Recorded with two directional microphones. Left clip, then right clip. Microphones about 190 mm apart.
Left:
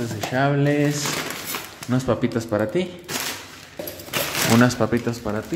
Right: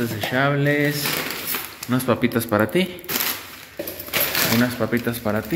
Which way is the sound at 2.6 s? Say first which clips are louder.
Right 3 dB; 5° left (ahead or behind).